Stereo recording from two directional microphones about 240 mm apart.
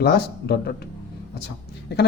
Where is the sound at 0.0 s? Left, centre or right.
Left.